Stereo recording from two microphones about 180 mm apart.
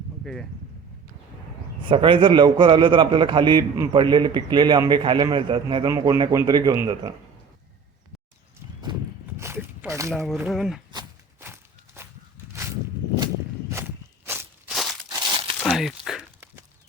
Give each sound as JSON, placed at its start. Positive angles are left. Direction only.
{"t": 1.9, "sound": "a man's voice", "side_deg": -30}
{"t": 8.9, "sound": "horse", "side_deg": -25}
{"t": 9.2, "sound": "a sound", "side_deg": -15}
{"t": 10.3, "sound": "speech", "side_deg": -5}
{"t": 10.9, "sound": "walk", "side_deg": -15}
{"t": 13.1, "sound": "walk", "side_deg": -25}
{"t": 13.7, "sound": "walk", "side_deg": -15}
{"t": 14.7, "sound": "a sound", "side_deg": 0}
{"t": 15.5, "sound": "crumpling", "side_deg": 0}